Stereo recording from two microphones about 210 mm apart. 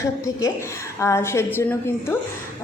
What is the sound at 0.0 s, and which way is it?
A woman's voice, 15° left (ahead or behind).